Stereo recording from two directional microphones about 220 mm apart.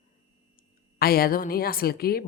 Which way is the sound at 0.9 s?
45° left (ahead or behind).